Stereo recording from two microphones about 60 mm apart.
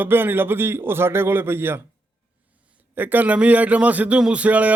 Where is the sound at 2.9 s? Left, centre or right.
Right.